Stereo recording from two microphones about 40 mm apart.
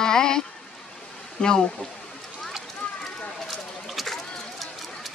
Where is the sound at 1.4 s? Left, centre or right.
Centre.